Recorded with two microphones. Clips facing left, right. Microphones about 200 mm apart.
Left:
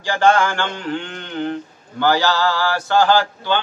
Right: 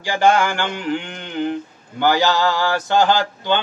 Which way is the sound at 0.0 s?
15° right (ahead or behind).